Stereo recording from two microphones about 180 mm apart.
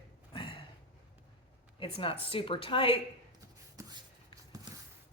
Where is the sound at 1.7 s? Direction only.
30° left (ahead or behind).